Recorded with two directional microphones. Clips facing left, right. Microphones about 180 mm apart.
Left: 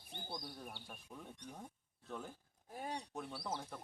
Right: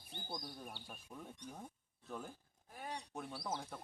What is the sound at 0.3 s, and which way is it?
Speech, 5° left (ahead or behind).